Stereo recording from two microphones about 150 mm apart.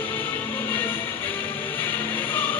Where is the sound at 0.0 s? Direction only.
15° left (ahead or behind).